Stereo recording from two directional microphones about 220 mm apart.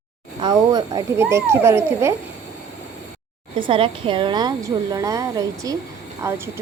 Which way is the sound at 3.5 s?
25° right (ahead or behind).